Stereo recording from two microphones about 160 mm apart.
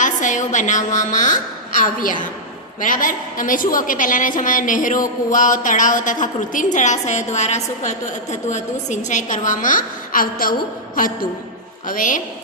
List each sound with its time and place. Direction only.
0.0 s a woman's voice: 55° left (ahead or behind)